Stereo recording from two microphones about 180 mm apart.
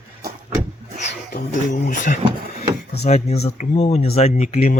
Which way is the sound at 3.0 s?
35° left (ahead or behind).